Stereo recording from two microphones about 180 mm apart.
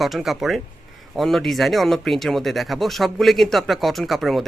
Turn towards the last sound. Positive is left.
turn(degrees=0)  # may be behind; listen again after turning